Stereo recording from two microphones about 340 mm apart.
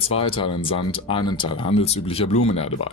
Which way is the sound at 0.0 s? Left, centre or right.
Centre.